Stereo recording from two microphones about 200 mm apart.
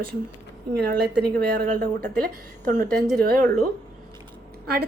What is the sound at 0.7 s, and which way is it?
Speech, 50° right (ahead or behind).